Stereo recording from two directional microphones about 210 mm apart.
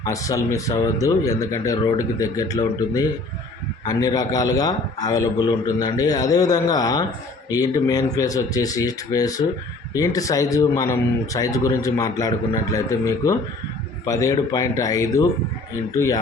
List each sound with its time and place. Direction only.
0.0 s a man's voice: 15° left (ahead or behind)